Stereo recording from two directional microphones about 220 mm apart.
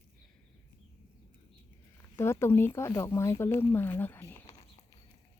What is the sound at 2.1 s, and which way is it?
Speech, 10° left (ahead or behind).